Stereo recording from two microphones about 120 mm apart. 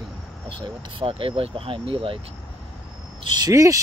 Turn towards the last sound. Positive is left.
turn(degrees=-25)  # may be behind; listen again after turning